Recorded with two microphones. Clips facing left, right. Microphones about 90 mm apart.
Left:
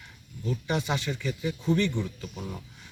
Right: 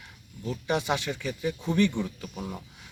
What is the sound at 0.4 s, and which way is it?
Speech, 15° right (ahead or behind).